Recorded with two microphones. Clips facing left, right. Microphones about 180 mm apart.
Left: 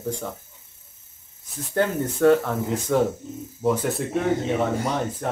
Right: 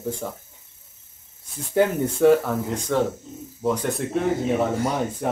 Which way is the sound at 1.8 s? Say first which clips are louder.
Right 2 dB; centre (ahead or behind).